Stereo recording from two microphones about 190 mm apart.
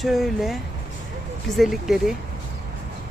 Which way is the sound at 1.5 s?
Centre (ahead or behind).